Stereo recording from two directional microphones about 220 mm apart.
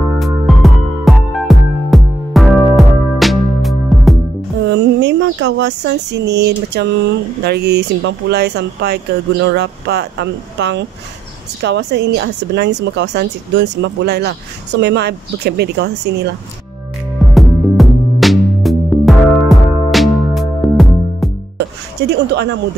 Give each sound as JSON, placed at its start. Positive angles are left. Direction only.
{"t": 0.2, "sound": "music", "side_deg": 0}
{"t": 4.6, "sound": "speech", "side_deg": -55}
{"t": 17.3, "sound": "music", "side_deg": 0}
{"t": 21.5, "sound": "a sound", "side_deg": -50}